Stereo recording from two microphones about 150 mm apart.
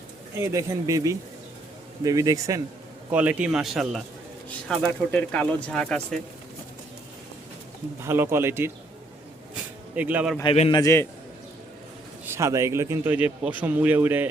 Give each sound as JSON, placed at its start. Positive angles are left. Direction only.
{"t": 0.3, "sound": "speech", "side_deg": -20}
{"t": 3.1, "sound": "speech", "side_deg": -10}
{"t": 8.0, "sound": "speech", "side_deg": -15}
{"t": 9.9, "sound": "speech", "side_deg": -10}
{"t": 10.4, "sound": "a man's voice", "side_deg": 40}
{"t": 10.8, "sound": "a man's voice", "side_deg": 20}
{"t": 12.3, "sound": "speech", "side_deg": -20}